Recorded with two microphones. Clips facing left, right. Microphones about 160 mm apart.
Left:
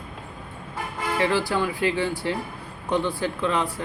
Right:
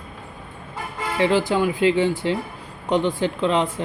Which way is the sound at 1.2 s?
20° right (ahead or behind).